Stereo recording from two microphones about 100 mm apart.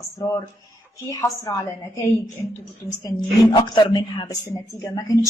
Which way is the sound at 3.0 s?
50° left (ahead or behind).